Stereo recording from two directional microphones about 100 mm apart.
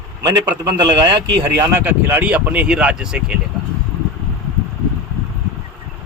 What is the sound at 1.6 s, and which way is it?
Speech, 25° right (ahead or behind).